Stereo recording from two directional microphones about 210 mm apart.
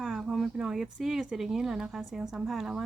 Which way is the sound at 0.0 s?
Centre (ahead or behind).